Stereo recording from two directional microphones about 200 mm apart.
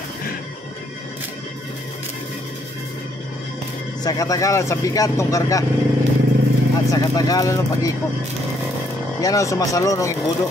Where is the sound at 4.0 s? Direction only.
20° left (ahead or behind).